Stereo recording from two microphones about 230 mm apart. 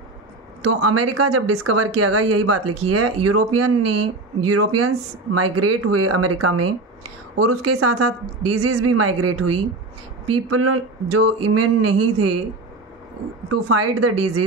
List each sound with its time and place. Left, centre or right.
0.7 s speech: right
13.5 s speech: right